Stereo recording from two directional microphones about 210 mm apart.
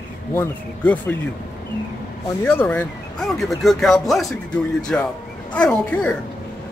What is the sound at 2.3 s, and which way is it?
Speech, 10° left (ahead or behind).